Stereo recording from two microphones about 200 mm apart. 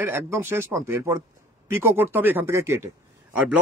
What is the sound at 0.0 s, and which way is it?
Speech, 10° right (ahead or behind).